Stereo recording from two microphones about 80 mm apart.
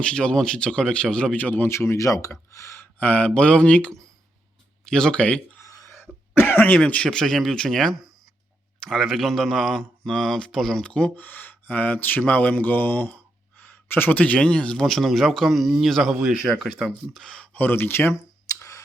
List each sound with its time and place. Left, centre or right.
0.0 s speech: centre
1.7 s speech: left
2.8 s speech: left
5.6 s a sound: left
6.0 s cough: left
6.7 s speech: centre
16.1 s speech: centre; by 18.2 s left
18.4 s music: left